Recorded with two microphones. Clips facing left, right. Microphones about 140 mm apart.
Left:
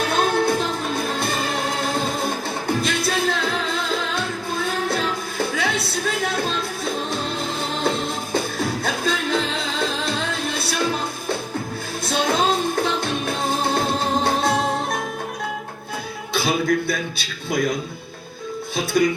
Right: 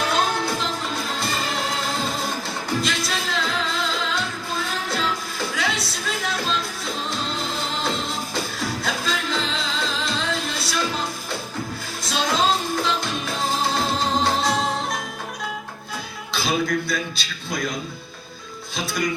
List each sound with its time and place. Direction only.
0.0 s music: 55° left (ahead or behind)
12.0 s music: 55° left (ahead or behind)
16.3 s a man's voice: 60° left (ahead or behind)